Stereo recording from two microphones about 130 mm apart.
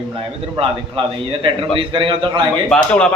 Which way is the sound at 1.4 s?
40° right (ahead or behind).